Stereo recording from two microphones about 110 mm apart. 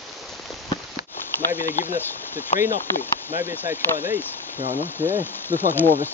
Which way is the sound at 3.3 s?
25° right (ahead or behind).